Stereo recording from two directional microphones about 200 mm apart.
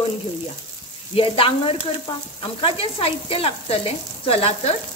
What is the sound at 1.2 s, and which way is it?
Speech, 25° left (ahead or behind).